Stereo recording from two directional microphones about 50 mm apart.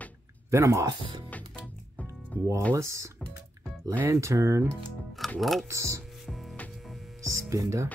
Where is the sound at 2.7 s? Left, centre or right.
Right.